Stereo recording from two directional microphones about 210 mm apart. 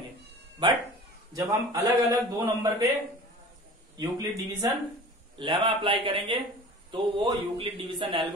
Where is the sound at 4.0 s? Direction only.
20° right (ahead or behind).